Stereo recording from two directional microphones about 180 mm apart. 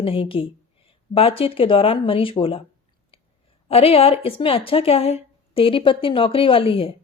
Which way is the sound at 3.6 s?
30° left (ahead or behind).